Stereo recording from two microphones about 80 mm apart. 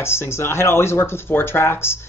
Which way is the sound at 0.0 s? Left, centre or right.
Left.